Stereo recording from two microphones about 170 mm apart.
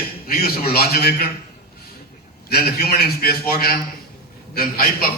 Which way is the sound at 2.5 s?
65° left (ahead or behind).